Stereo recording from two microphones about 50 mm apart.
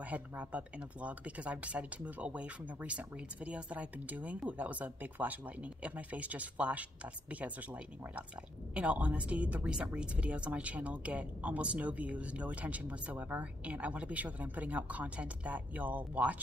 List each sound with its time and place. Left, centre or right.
0.1 s speech: right
8.7 s speech: right